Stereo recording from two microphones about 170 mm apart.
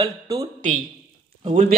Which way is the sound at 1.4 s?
35° right (ahead or behind).